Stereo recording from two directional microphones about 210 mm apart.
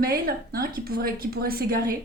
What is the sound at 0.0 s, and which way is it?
Speech, 45° right (ahead or behind).